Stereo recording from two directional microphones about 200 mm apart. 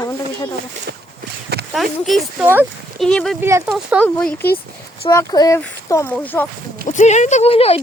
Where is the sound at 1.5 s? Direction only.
55° right (ahead or behind).